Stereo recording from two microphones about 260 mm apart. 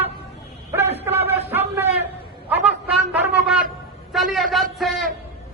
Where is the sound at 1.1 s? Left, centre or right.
Right.